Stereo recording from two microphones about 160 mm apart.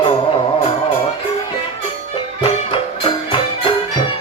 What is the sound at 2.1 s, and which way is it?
Music, 35° left (ahead or behind).